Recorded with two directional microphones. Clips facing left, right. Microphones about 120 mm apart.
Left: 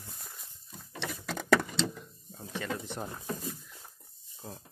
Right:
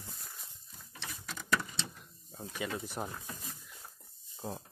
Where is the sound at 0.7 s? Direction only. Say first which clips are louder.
Left 9 dB; 80° left.